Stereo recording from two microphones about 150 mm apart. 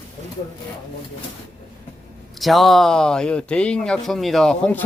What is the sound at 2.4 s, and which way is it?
Speech, centre (ahead or behind).